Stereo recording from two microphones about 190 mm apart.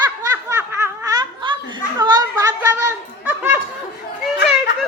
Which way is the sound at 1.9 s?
20° right (ahead or behind).